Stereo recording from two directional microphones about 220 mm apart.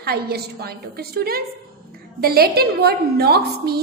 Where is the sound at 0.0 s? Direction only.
45° right (ahead or behind).